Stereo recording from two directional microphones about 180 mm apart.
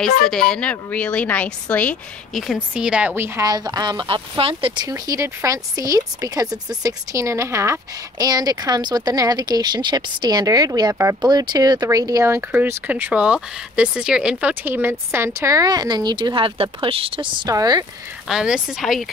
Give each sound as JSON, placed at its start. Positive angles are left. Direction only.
{"t": 0.3, "sound": "speech", "side_deg": 5}
{"t": 18.3, "sound": "a woman's voice", "side_deg": -5}